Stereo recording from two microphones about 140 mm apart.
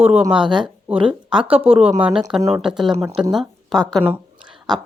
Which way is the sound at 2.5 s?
5° right (ahead or behind).